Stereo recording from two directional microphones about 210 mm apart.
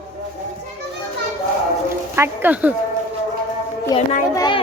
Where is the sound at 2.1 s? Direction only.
10° right (ahead or behind).